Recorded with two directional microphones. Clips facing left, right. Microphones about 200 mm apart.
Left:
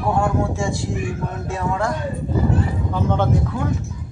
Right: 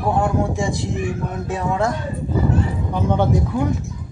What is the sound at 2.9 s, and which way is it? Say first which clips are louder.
Speech: right 2 dB; 15° right (ahead or behind).